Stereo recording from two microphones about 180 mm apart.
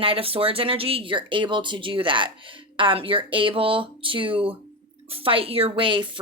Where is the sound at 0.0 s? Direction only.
30° right (ahead or behind).